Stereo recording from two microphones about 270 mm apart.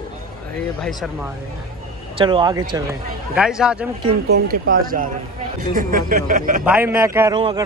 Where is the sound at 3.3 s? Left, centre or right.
Centre.